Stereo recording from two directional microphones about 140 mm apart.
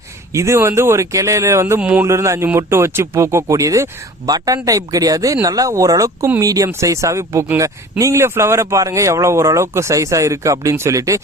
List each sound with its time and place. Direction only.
0.3 s speech: 20° right (ahead or behind)